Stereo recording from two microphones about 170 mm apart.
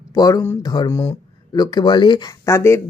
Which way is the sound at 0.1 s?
20° left (ahead or behind).